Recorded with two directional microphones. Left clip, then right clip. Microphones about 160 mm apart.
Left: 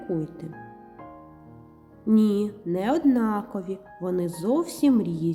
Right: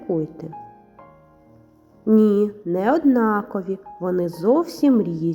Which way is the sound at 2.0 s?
25° left (ahead or behind).